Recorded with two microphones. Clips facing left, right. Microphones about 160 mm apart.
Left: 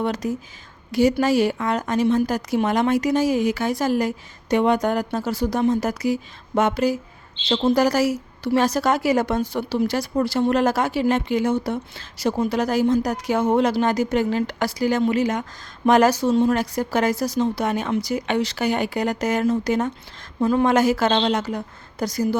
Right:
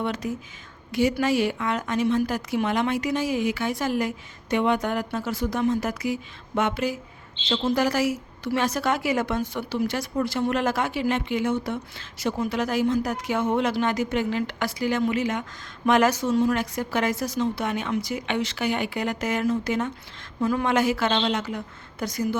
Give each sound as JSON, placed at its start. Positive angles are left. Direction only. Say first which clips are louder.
{"t": 0.0, "sound": "a woman's voice", "louder": "left 4 dB", "side_deg": 40}